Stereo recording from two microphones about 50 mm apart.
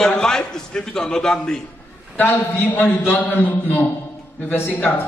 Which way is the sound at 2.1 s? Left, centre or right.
Left.